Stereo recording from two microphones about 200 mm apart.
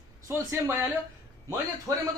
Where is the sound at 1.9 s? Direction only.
15° right (ahead or behind).